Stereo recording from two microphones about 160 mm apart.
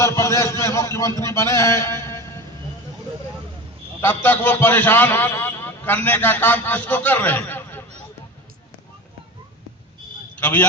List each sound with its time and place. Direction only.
0.0 s a man's voice: 20° left (ahead or behind)
4.0 s a man's voice: 10° left (ahead or behind)
10.4 s a man's voice: 10° left (ahead or behind)